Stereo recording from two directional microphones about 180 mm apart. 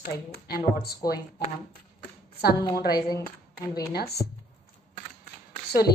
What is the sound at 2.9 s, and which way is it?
Speech, 20° left (ahead or behind).